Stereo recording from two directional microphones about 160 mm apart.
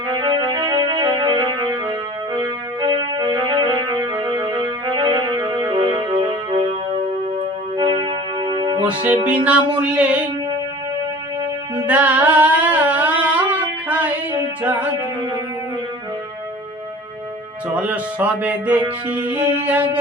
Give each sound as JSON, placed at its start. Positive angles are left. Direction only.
{"t": 0.1, "sound": "music", "side_deg": -25}
{"t": 7.8, "sound": "music", "side_deg": -30}
{"t": 9.2, "sound": "music", "side_deg": -10}
{"t": 11.9, "sound": "a sound", "side_deg": -10}
{"t": 14.6, "sound": "music", "side_deg": -10}
{"t": 17.7, "sound": "music", "side_deg": -10}